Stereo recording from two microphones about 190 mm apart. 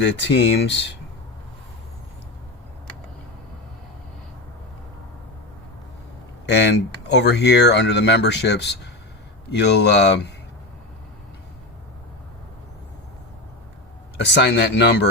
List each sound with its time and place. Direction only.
0.0 s speech: 70° left (ahead or behind)
6.4 s speech: 65° left (ahead or behind)
14.2 s speech: 65° left (ahead or behind)